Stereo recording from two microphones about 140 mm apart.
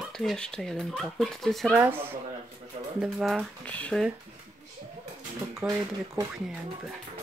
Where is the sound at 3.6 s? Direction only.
10° left (ahead or behind).